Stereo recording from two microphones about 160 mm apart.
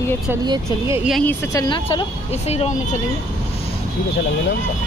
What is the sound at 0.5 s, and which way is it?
Speech, 20° right (ahead or behind).